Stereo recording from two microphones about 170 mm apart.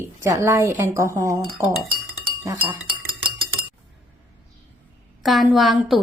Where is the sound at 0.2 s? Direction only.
15° right (ahead or behind).